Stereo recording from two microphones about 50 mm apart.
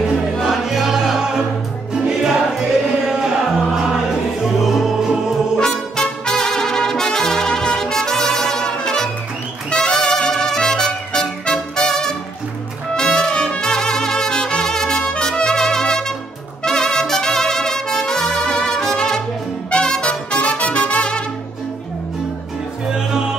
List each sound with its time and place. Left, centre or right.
0.4 s music: centre
5.6 s trumpet: centre
9.8 s music: centre
16.6 s trumpet: centre
19.7 s music: centre
22.9 s music: centre